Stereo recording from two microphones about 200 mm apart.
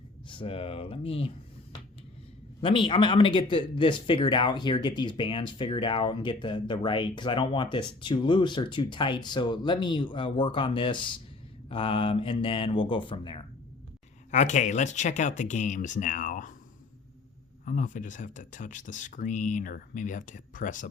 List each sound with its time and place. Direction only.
0.3 s speech: 25° left (ahead or behind)
2.6 s speech: 25° left (ahead or behind)
14.3 s speech: 35° left (ahead or behind)
17.7 s speech: 40° left (ahead or behind)